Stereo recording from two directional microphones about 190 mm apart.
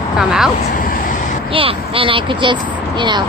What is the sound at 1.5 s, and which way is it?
Speech, 30° right (ahead or behind).